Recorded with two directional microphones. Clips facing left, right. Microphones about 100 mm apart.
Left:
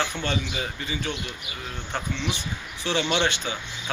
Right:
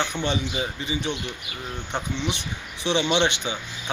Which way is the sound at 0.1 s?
20° right (ahead or behind).